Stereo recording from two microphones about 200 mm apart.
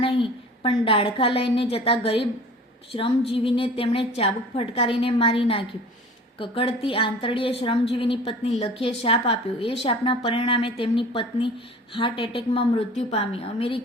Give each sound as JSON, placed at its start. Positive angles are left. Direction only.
{"t": 0.0, "sound": "a woman's voice", "side_deg": 25}